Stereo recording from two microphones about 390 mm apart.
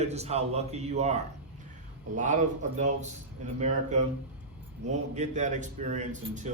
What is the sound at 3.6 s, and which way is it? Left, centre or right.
A man's voice, centre.